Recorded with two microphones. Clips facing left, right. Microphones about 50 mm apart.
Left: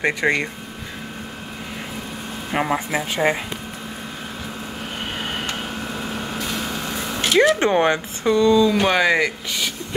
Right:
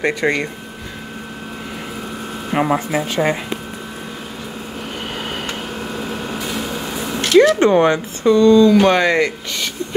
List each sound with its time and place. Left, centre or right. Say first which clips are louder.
0.0 s speech: right 2 dB; centre
2.5 s speech: right 4 dB; centre
6.4 s a sound: right 2 dB; centre
7.2 s speech: right 5 dB; centre